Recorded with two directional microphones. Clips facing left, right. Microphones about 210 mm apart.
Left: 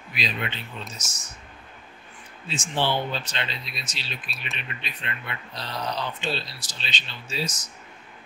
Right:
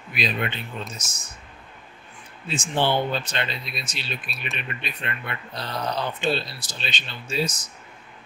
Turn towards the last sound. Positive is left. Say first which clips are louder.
# right 5 dB
turn(degrees=-55)  # may be behind; listen again after turning